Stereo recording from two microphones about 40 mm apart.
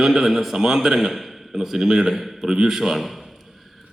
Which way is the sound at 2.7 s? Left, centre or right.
Centre.